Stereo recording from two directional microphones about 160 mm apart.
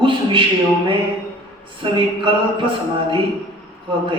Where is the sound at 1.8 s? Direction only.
30° right (ahead or behind).